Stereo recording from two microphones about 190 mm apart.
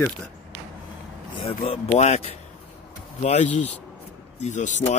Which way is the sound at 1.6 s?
30° left (ahead or behind).